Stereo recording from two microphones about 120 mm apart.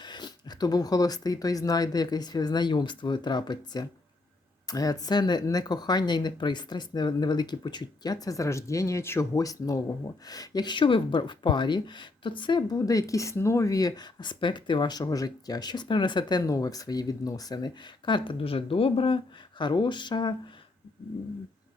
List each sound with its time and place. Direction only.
0.0 s speech: 40° left (ahead or behind)